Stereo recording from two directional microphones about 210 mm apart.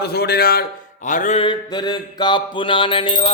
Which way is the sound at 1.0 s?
35° left (ahead or behind).